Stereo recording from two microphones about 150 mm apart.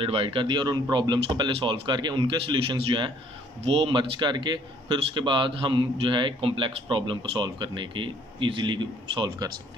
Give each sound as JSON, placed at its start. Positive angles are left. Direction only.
{"t": 0.0, "sound": "a man's voice", "side_deg": -35}